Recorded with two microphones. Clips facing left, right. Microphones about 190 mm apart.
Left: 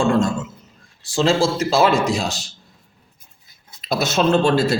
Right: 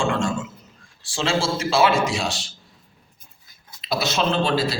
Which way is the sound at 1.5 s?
40° left (ahead or behind).